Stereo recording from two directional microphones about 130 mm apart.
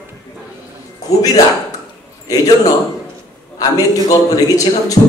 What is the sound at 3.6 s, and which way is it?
A man's voice, 30° left (ahead or behind).